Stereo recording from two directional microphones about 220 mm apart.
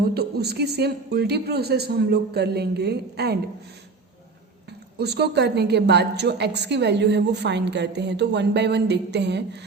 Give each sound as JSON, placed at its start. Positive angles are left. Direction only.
{"t": 0.0, "sound": "a woman's voice", "side_deg": -45}
{"t": 4.9, "sound": "a woman's voice", "side_deg": -50}